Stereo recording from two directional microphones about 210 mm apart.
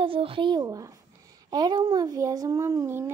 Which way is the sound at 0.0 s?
25° right (ahead or behind).